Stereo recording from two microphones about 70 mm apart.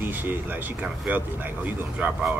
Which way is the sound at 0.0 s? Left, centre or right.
Right.